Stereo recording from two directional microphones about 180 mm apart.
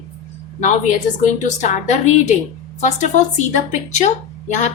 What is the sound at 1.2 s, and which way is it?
Speech, 40° left (ahead or behind).